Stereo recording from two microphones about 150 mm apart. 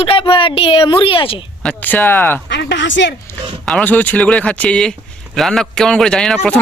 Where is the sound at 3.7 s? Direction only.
10° left (ahead or behind).